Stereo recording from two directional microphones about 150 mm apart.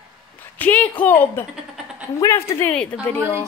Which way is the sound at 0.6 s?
10° left (ahead or behind).